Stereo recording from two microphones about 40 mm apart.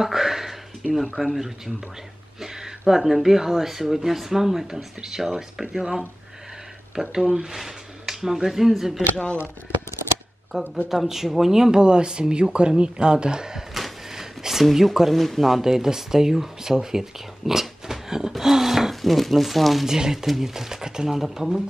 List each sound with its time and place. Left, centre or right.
0.0 s a sound: centre
1.1 s speech: centre
9.1 s speech: left
10.5 s speech: centre
14.1 s speech: centre
19.9 s speech: centre